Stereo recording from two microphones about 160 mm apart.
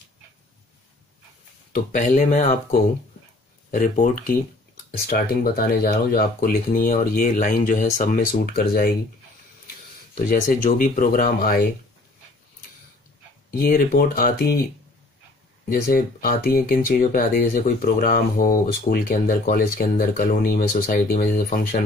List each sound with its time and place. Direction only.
1.7 s speech: 55° left (ahead or behind)
5.1 s speech: 65° left (ahead or behind)
10.1 s speech: 55° left (ahead or behind)
13.5 s speech: 65° left (ahead or behind)
15.7 s speech: 60° left (ahead or behind)